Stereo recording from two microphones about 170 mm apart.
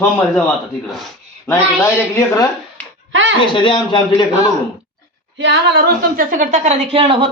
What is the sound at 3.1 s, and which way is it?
Speech, 90° right.